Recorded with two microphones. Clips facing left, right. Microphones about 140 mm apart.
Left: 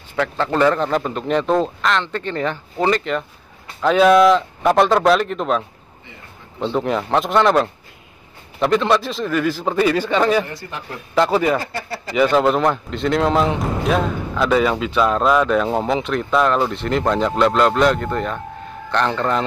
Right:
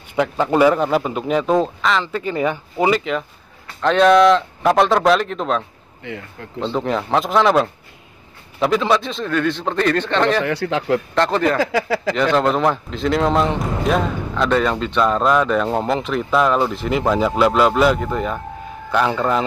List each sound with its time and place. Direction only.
0.1 s a man's voice: 15° right (ahead or behind); by 5.6 s centre (ahead or behind)
6.6 s speech: 5° left (ahead or behind)
10.4 s speech: 85° right
11.1 s speech: 5° left (ahead or behind)
11.5 s speech: 90° right
12.2 s a man's voice: 5° left (ahead or behind)